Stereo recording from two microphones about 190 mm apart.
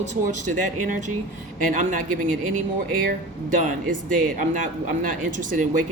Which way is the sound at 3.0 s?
45° right (ahead or behind).